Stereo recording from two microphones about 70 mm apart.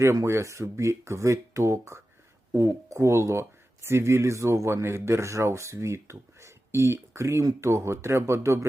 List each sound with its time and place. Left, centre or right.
0.0 s speech: right